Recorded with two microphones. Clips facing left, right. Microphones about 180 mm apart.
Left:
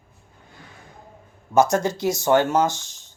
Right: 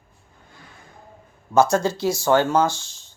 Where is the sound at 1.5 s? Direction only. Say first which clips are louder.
Right 1 dB; 20° left (ahead or behind).